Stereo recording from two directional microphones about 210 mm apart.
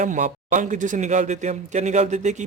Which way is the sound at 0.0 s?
35° right (ahead or behind).